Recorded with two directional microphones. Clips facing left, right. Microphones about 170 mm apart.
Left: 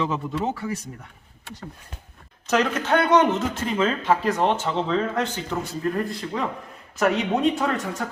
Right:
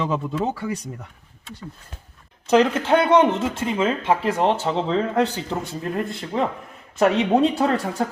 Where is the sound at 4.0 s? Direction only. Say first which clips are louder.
Right 1 dB; 25° right (ahead or behind).